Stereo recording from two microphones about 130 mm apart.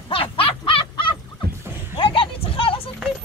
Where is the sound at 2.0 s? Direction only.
45° left (ahead or behind).